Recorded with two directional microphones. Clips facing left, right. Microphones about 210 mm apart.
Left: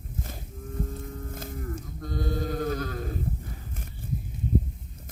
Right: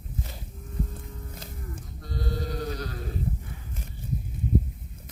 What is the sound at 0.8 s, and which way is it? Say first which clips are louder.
Livestock: left 5 dB; 50° left (ahead or behind).